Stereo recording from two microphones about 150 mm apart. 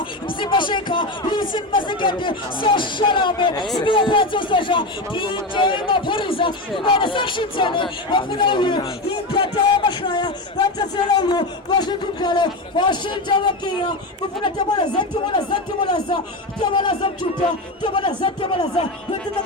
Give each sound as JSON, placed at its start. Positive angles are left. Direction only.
{"t": 0.3, "sound": "a man's voice", "side_deg": 35}